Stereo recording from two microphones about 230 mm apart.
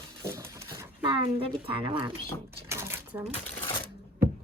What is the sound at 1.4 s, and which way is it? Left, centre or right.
Speech, right.